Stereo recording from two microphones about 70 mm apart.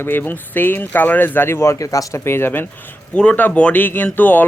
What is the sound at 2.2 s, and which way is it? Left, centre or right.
Speech, left.